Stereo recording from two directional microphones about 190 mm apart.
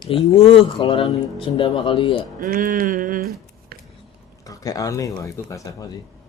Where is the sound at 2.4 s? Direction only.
45° right (ahead or behind).